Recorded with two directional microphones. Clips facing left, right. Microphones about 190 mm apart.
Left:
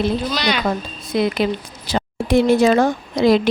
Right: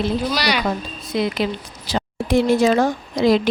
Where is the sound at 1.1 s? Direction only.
55° left (ahead or behind).